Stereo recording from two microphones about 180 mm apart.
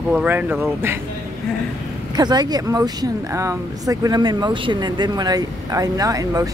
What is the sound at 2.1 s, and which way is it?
Speech, 25° right (ahead or behind).